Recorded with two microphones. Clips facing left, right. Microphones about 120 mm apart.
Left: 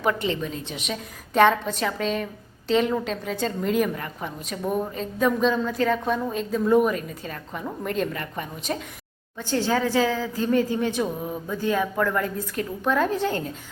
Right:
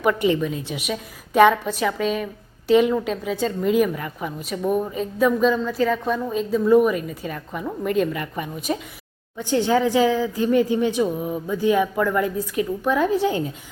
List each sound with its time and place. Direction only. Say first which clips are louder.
0.2 s a woman's voice: right 6 dB; 10° right (ahead or behind)
11.0 s a woman's voice: right 5 dB; 5° right (ahead or behind)